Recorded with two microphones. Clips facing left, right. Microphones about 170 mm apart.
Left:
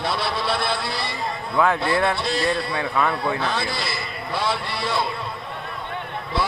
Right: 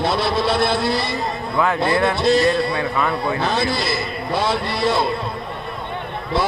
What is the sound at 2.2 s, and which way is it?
Speech, 45° right (ahead or behind).